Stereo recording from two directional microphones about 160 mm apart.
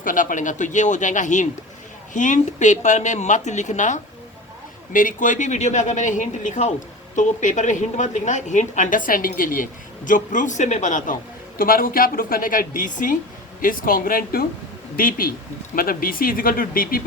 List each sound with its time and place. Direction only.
0.0 s a woman's voice: 55° left (ahead or behind)